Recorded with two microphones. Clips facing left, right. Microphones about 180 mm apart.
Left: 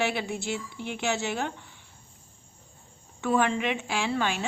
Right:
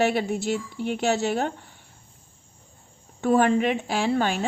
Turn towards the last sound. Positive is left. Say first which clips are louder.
# right 5 dB
turn(degrees=-40)  # may be behind; listen again after turning